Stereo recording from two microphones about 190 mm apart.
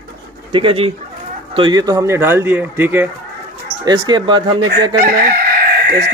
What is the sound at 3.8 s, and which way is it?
Speech, 20° right (ahead or behind).